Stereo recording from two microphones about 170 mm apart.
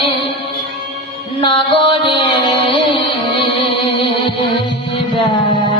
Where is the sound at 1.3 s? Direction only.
30° left (ahead or behind).